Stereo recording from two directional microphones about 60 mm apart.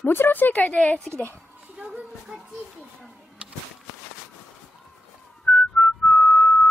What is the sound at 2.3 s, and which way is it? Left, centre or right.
Speech, centre.